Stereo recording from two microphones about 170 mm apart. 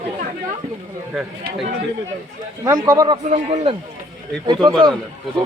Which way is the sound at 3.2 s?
40° right (ahead or behind).